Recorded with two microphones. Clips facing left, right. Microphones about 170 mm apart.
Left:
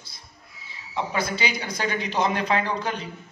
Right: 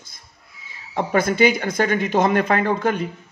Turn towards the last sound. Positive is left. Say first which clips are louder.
# right 6 dB
turn(degrees=-50)  # may be behind; listen again after turning